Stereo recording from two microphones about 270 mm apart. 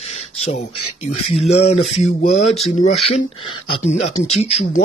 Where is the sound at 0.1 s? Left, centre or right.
Left.